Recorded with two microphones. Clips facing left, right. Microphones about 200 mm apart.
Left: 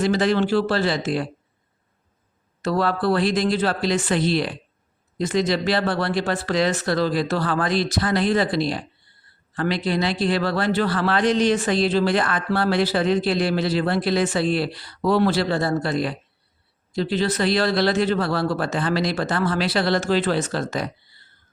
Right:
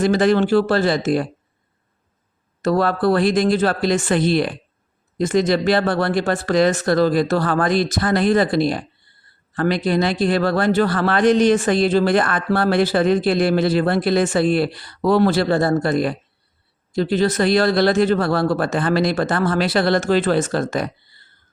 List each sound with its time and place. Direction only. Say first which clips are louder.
0.0 s a man's voice: right 4 dB; 50° right (ahead or behind)
2.6 s a man's voice: right 4 dB; 50° right (ahead or behind)